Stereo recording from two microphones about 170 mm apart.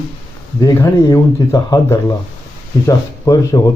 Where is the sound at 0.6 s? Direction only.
15° left (ahead or behind).